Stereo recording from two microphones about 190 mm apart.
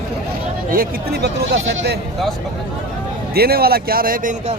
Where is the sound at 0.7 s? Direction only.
50° right (ahead or behind).